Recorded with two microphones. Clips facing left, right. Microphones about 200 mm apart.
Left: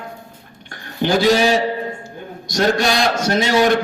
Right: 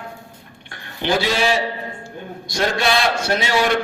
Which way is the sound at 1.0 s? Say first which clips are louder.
Left 5 dB; 45° left (ahead or behind).